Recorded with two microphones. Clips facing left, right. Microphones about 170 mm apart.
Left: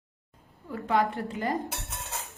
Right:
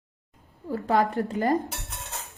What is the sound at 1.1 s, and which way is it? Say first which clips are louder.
Speech: right 6 dB; 40° right (ahead or behind).